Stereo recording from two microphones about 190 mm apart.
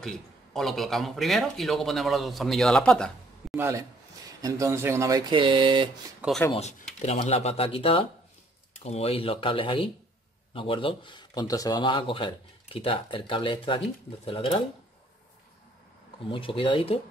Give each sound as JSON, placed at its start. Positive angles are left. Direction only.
{"t": 0.0, "sound": "speech", "side_deg": 5}
{"t": 3.5, "sound": "a man's voice", "side_deg": -15}
{"t": 5.3, "sound": "speech", "side_deg": -25}
{"t": 6.5, "sound": "speech", "side_deg": 35}
{"t": 16.3, "sound": "speech", "side_deg": 25}